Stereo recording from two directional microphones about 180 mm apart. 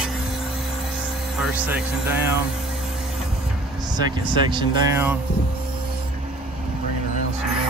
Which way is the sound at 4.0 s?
25° right (ahead or behind).